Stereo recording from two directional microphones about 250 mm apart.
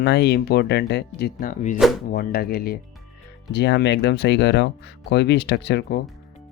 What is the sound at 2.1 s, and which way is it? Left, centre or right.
Speech, left.